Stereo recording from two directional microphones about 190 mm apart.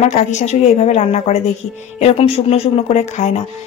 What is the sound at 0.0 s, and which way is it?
Speech, 35° left (ahead or behind).